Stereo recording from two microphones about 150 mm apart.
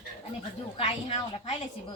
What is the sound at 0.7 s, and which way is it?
Speech, 40° left (ahead or behind).